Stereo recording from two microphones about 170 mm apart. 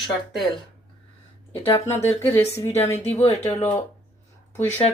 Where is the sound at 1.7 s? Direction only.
15° left (ahead or behind).